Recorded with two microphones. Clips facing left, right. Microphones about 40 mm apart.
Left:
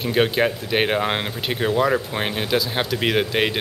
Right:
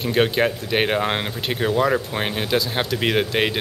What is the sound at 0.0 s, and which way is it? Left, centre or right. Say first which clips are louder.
Speech: even; centre.